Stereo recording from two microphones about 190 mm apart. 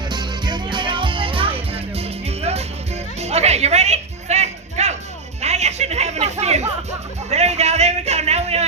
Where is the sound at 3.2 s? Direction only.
35° right (ahead or behind).